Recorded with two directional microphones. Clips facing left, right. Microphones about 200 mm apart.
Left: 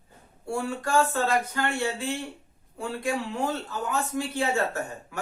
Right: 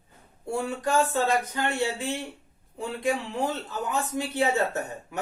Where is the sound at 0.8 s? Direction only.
20° right (ahead or behind).